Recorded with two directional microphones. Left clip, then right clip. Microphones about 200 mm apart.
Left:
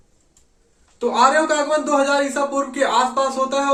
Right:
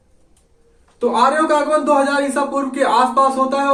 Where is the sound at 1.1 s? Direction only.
20° left (ahead or behind).